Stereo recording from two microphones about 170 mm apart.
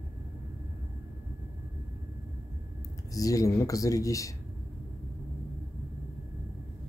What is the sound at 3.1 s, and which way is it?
Speech, 20° left (ahead or behind).